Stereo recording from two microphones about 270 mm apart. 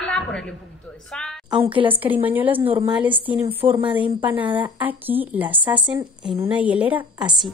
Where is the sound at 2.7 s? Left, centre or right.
Centre.